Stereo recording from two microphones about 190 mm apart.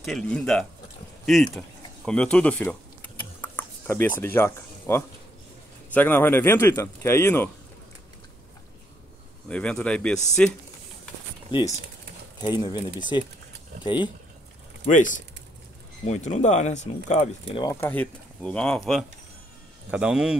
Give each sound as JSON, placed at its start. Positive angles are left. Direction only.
{"t": 0.0, "sound": "speech", "side_deg": 0}
{"t": 2.0, "sound": "a sound", "side_deg": 5}
{"t": 4.2, "sound": "a man's voice", "side_deg": 10}
{"t": 9.5, "sound": "speech", "side_deg": 5}
{"t": 12.4, "sound": "speech", "side_deg": 20}
{"t": 14.9, "sound": "speech", "side_deg": 40}
{"t": 17.6, "sound": "speech", "side_deg": 15}